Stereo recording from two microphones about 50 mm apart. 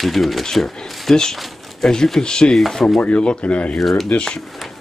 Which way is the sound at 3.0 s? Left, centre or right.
Left.